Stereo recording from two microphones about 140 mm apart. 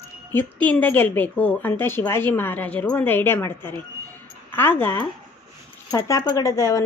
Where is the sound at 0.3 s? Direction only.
15° left (ahead or behind).